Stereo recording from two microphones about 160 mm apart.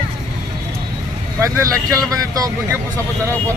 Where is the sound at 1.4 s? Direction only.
20° right (ahead or behind).